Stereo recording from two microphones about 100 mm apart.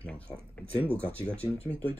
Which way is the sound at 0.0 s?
15° left (ahead or behind).